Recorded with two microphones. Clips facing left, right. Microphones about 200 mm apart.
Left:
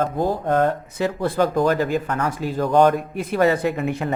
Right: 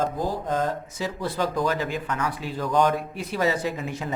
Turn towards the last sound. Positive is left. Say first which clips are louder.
# left 6 dB
turn(degrees=60)  # may be behind; listen again after turning